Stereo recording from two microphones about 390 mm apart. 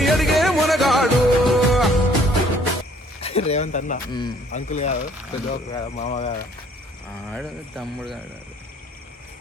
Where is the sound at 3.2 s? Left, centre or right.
Centre.